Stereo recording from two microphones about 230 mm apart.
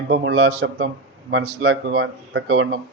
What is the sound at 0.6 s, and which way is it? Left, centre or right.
Speech, right.